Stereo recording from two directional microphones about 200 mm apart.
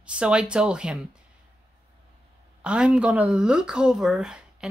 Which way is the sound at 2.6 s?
5° right (ahead or behind).